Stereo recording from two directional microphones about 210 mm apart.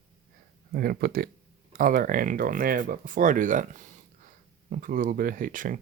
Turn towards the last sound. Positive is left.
turn(degrees=-40)  # may be behind; listen again after turning